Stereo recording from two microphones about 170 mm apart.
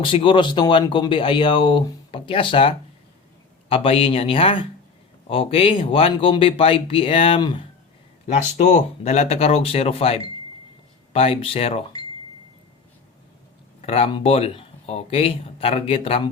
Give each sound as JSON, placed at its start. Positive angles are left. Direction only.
{"t": 0.0, "sound": "speech", "side_deg": 30}
{"t": 8.3, "sound": "speech", "side_deg": 40}
{"t": 13.8, "sound": "speech", "side_deg": 35}